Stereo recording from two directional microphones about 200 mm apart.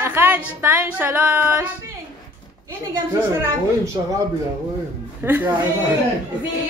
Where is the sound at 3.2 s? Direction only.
10° right (ahead or behind).